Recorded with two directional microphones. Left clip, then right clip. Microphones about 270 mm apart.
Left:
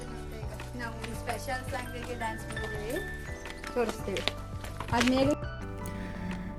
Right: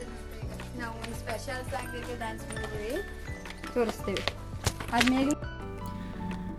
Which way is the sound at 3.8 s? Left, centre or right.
Right.